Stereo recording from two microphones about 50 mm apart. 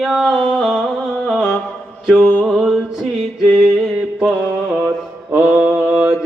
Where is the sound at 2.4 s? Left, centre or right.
Centre.